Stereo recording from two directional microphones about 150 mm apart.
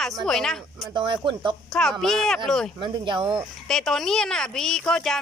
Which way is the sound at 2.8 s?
35° right (ahead or behind).